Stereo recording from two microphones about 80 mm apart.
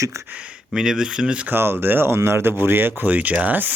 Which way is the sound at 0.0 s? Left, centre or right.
Right.